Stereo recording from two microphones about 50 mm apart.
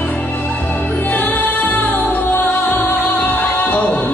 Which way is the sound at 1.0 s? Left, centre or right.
Left.